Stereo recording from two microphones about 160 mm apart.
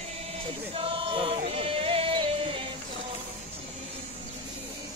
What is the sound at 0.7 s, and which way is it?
Choir, 35° right (ahead or behind).